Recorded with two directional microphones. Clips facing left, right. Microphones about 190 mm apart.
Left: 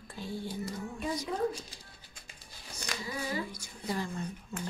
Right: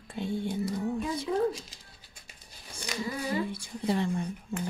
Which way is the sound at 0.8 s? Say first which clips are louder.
Right 5 dB; 30° right (ahead or behind).